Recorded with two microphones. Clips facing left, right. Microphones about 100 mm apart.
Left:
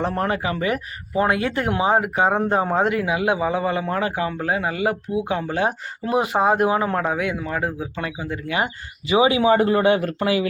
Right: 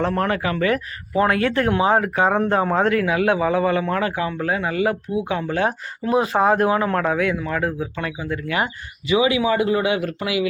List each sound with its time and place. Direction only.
0.0 s speech: 25° left (ahead or behind)